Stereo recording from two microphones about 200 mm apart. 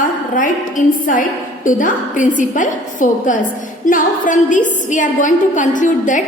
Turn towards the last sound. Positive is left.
turn(degrees=40)  # may be behind; listen again after turning